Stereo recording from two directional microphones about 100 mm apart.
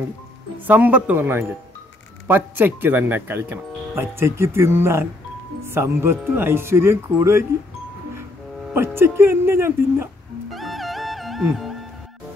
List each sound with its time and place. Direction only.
0.7 s speech: 15° right (ahead or behind)
8.7 s speech: 25° right (ahead or behind)
10.5 s music: centre (ahead or behind)